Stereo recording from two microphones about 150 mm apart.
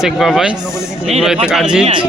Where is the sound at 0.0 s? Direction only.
Centre (ahead or behind).